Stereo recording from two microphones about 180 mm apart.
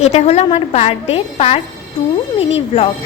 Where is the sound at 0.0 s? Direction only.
35° left (ahead or behind).